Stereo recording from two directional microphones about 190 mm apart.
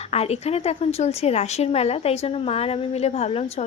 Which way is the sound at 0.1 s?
35° left (ahead or behind).